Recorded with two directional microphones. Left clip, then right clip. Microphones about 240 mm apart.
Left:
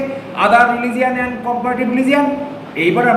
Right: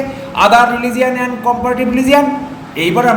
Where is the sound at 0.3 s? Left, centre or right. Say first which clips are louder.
Right 3 dB; centre.